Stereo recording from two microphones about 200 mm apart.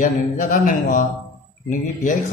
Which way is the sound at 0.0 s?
40° left (ahead or behind).